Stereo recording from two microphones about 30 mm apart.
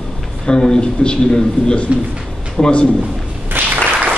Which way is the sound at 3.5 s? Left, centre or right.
Right.